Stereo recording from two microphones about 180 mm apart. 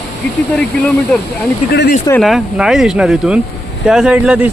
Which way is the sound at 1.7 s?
60° left (ahead or behind).